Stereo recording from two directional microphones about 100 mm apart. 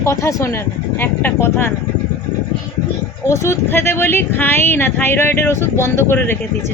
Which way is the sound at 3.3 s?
30° left (ahead or behind).